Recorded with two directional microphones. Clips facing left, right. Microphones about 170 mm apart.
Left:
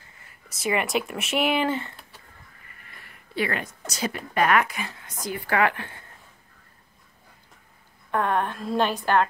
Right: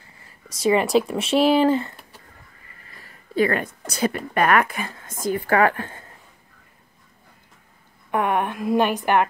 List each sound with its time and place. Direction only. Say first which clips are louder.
0.2 s speech: right 8 dB; 30° right (ahead or behind)
8.1 s a woman's voice: right 2 dB; 15° right (ahead or behind)